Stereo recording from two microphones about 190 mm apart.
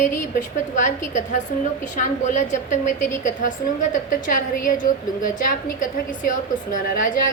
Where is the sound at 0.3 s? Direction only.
40° left (ahead or behind).